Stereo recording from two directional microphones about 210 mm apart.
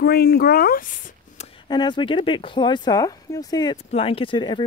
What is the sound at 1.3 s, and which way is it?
Speech, 20° left (ahead or behind).